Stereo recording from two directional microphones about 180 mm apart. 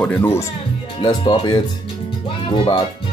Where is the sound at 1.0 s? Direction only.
25° left (ahead or behind).